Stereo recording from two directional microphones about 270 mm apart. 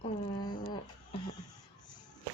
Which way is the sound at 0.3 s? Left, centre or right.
Centre.